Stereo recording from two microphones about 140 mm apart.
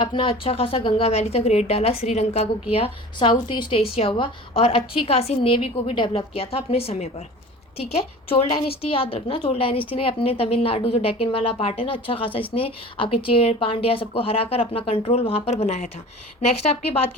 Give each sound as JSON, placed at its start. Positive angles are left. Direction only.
{"t": 0.0, "sound": "a woman's voice", "side_deg": 35}
{"t": 8.3, "sound": "a woman's voice", "side_deg": 40}